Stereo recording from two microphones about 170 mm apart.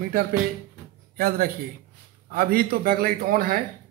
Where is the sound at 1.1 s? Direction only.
60° right (ahead or behind).